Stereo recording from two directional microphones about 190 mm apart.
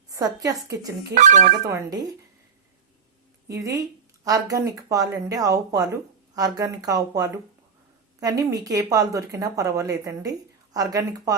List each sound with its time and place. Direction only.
0.1 s speech: 20° right (ahead or behind)
1.1 s speech: 40° right (ahead or behind)
1.6 s speech: 20° right (ahead or behind)
3.5 s speech: 15° right (ahead or behind)